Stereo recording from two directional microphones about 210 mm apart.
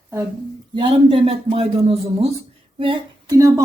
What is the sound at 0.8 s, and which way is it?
A woman's voice, 25° right (ahead or behind).